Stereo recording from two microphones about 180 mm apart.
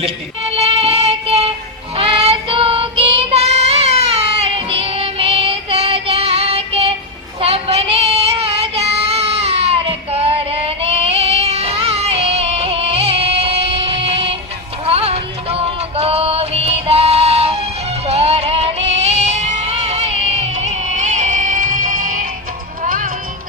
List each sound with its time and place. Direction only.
0.5 s music: 35° right (ahead or behind)
2.0 s child singing: 30° right (ahead or behind)
14.8 s music: 35° right (ahead or behind); by 23.0 s 50° right (ahead or behind)